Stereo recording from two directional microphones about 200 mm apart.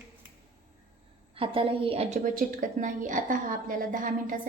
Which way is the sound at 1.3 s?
25° right (ahead or behind).